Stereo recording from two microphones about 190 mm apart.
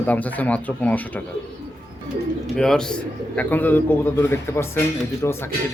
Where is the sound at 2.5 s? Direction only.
5° left (ahead or behind).